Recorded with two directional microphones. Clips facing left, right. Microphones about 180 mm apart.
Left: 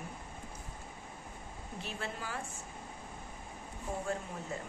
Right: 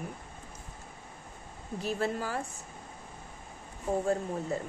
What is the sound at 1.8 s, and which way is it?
Speech, 40° right (ahead or behind).